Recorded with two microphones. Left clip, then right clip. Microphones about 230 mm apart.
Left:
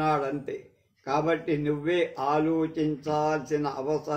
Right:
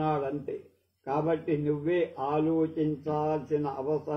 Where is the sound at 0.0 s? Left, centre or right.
Left.